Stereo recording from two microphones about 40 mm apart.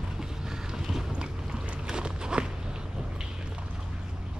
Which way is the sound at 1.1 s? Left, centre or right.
Centre.